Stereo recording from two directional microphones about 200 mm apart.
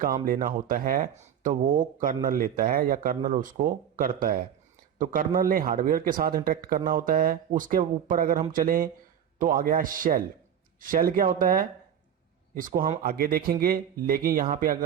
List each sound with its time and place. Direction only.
0.3 s speech: 45° right (ahead or behind)